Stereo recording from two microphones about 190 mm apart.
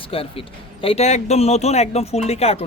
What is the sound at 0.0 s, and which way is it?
Speech, 30° left (ahead or behind).